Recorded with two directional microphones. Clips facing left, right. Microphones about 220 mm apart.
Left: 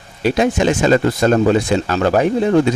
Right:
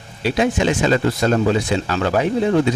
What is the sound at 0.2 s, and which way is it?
Speech, 45° left (ahead or behind).